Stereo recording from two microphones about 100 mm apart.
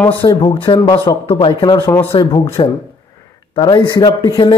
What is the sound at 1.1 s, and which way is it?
Speech, 45° left (ahead or behind).